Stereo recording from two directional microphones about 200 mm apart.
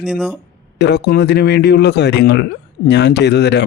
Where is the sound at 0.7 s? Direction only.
60° left (ahead or behind).